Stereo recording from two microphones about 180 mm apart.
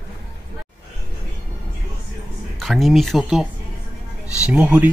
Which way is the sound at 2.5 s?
Centre (ahead or behind).